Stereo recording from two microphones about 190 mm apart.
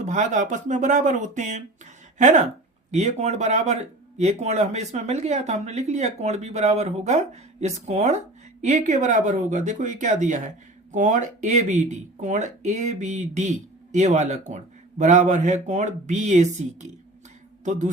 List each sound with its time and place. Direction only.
0.0 s a man's voice: 40° right (ahead or behind)